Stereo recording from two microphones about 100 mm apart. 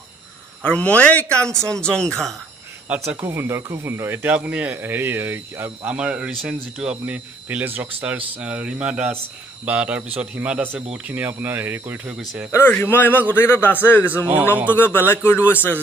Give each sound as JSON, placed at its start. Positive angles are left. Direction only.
{"t": 0.6, "sound": "speech", "side_deg": 15}
{"t": 3.2, "sound": "speech", "side_deg": -25}
{"t": 4.8, "sound": "speech", "side_deg": -25}
{"t": 12.2, "sound": "speech", "side_deg": 0}
{"t": 12.4, "sound": "speech", "side_deg": 25}
{"t": 14.2, "sound": "speech", "side_deg": -15}
{"t": 14.7, "sound": "speech", "side_deg": 20}